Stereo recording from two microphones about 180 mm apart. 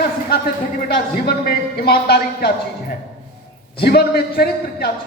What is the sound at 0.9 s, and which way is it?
A man's voice, 60° left (ahead or behind).